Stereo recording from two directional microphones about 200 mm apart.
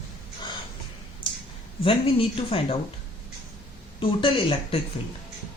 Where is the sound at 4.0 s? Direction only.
25° left (ahead or behind).